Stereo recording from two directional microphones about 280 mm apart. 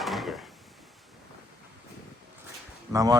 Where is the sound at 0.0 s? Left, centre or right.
Centre.